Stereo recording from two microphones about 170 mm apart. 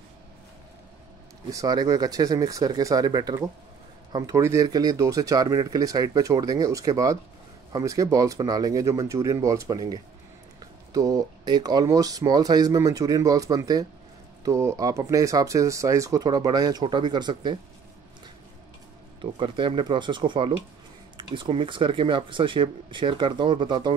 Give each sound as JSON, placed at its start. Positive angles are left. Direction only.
{"t": 1.5, "sound": "speech", "side_deg": -20}
{"t": 19.4, "sound": "speech", "side_deg": -30}